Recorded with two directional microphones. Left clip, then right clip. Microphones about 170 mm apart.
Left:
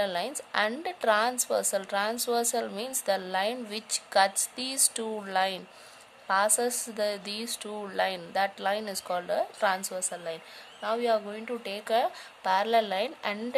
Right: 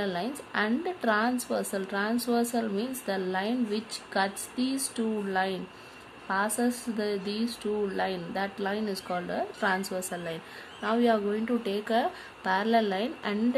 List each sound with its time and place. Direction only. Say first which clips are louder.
0.0 s a woman's voice: left 2 dB; 50° left (ahead or behind)